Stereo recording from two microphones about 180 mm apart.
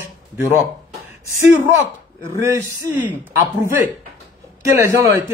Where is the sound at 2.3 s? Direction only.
15° right (ahead or behind).